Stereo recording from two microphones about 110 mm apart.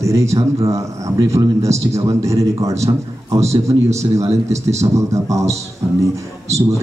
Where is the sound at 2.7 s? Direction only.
75° right (ahead or behind).